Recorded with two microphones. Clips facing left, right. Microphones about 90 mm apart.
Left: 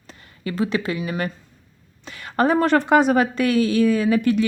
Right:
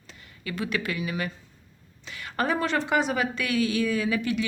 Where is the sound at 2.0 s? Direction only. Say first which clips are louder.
Left 8 dB; 40° left (ahead or behind).